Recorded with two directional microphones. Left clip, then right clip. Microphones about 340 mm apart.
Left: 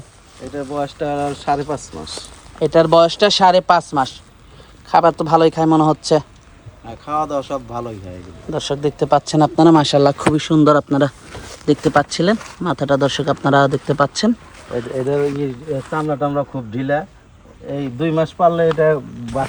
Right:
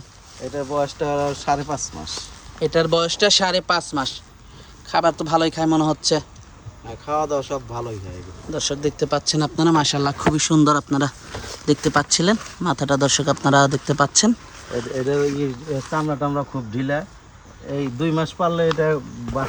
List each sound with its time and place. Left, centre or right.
0.5 s speech: right
2.6 s speech: centre
15.0 s speech: centre
15.8 s speech: centre